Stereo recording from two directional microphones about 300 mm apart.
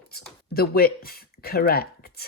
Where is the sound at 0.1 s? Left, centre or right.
Left.